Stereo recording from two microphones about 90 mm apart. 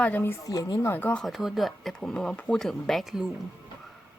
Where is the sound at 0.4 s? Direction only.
40° left (ahead or behind).